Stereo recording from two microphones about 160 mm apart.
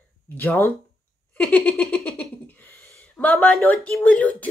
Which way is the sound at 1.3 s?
5° left (ahead or behind).